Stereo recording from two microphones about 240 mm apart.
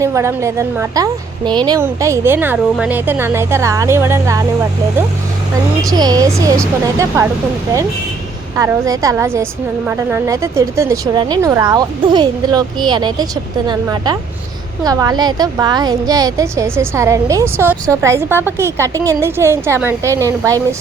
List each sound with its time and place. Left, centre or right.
0.0 s a woman's voice: centre
5.8 s a woman's voice: centre
8.5 s a woman's voice: centre